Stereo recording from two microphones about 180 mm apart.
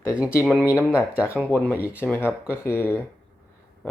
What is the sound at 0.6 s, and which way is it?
Speech, 5° right (ahead or behind).